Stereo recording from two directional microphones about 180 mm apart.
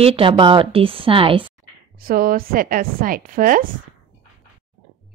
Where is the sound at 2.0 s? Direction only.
50° right (ahead or behind).